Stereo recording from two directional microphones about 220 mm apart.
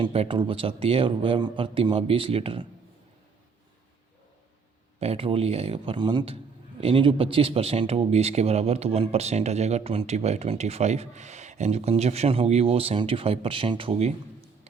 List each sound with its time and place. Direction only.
0.0 s speech: 25° right (ahead or behind)
4.9 s speech: 25° right (ahead or behind)